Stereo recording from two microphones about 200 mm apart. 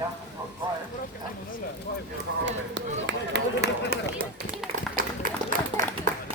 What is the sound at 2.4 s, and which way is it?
Run, 65° right (ahead or behind).